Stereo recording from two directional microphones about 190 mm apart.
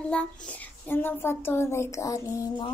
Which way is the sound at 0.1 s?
5° left (ahead or behind).